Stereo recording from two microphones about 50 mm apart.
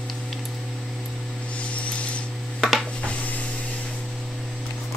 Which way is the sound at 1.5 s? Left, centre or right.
Left.